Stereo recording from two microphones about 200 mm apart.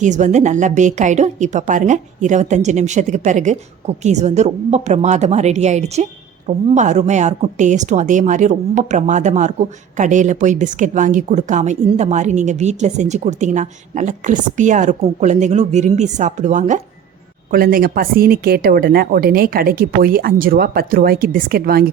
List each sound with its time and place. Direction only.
0.0 s a woman's voice: 35° right (ahead or behind)